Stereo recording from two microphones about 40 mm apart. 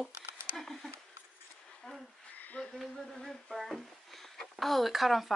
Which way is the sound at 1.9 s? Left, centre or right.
Left.